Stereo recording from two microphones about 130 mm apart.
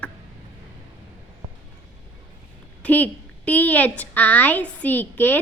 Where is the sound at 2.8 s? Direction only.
10° left (ahead or behind).